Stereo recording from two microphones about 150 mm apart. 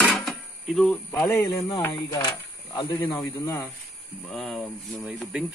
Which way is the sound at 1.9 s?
30° left (ahead or behind).